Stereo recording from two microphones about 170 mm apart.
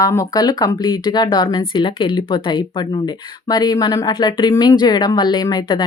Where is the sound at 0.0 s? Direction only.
20° left (ahead or behind).